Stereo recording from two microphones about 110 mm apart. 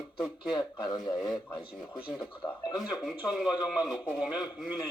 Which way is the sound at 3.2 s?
10° right (ahead or behind).